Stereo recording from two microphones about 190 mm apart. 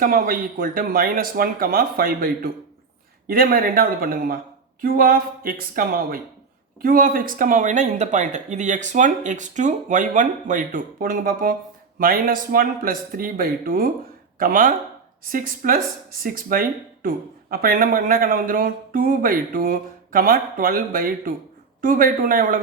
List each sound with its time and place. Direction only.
0.0 s speech: 50° right (ahead or behind)